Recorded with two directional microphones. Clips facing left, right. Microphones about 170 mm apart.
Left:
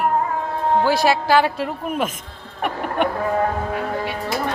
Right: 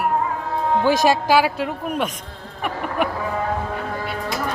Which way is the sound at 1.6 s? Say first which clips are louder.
Even; centre (ahead or behind).